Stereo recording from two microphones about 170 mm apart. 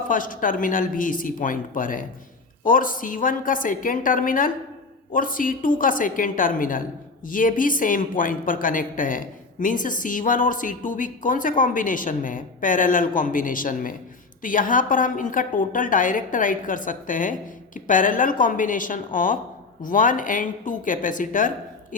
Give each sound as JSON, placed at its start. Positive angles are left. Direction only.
{"t": 0.1, "sound": "a woman's voice", "side_deg": 55}